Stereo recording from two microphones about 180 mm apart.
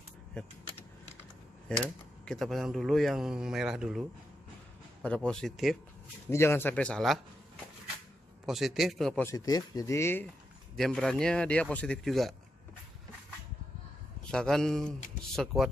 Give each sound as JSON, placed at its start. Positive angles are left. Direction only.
{"t": 0.3, "sound": "a man's voice", "side_deg": 5}
{"t": 2.2, "sound": "a man's voice", "side_deg": 0}
{"t": 5.0, "sound": "a man's voice", "side_deg": 5}
{"t": 8.5, "sound": "a man's voice", "side_deg": 0}
{"t": 9.2, "sound": "speech", "side_deg": 20}
{"t": 10.8, "sound": "a man's voice", "side_deg": 5}
{"t": 14.2, "sound": "a man's voice", "side_deg": 5}